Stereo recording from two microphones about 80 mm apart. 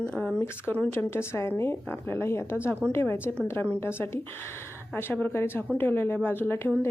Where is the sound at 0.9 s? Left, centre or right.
Left.